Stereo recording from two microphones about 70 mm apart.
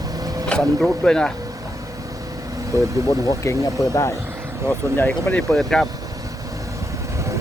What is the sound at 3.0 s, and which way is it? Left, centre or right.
Speech, left.